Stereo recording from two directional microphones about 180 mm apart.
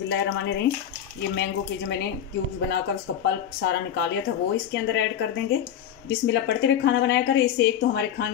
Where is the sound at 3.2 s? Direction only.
65° left (ahead or behind).